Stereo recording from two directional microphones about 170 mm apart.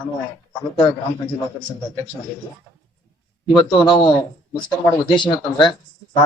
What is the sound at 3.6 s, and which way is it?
Speech, 25° left (ahead or behind).